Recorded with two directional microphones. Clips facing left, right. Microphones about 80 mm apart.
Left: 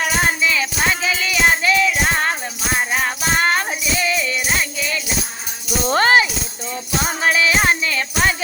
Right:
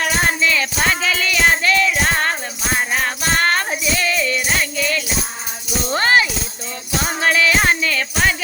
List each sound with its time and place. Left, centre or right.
0.0 s music: centre
3.9 s jingle bell: centre
5.9 s music: left
7.2 s music: centre